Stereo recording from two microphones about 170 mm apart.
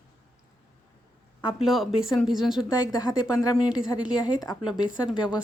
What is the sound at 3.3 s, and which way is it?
Speech, 20° left (ahead or behind).